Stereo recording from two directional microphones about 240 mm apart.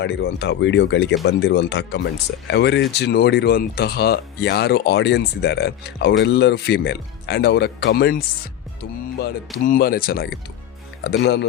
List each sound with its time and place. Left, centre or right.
0.0 s speech: left
9.6 s speech: left